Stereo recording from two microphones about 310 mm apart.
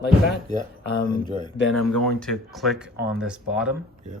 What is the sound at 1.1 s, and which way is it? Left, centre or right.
Speech, centre.